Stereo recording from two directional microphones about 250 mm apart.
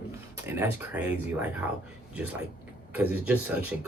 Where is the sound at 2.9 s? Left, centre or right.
Centre.